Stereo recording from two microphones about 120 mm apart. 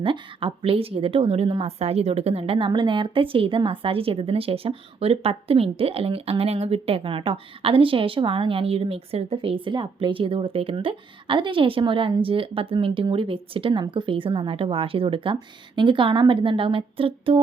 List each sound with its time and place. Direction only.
0.0 s a woman's voice: 45° right (ahead or behind)